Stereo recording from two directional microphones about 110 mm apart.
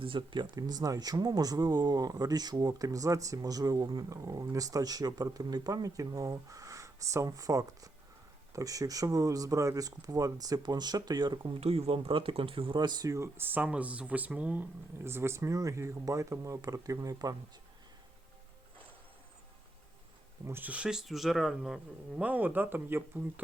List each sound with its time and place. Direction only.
0.0 s speech: 50° right (ahead or behind)
11.6 s speech: 65° right (ahead or behind); by 17.3 s 35° right (ahead or behind)
20.5 s speech: 15° right (ahead or behind)